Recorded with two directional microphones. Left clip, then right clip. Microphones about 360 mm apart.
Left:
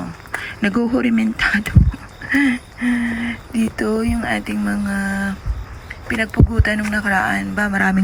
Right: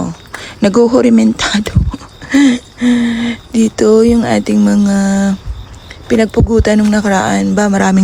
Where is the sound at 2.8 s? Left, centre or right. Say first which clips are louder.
Right 7 dB; centre.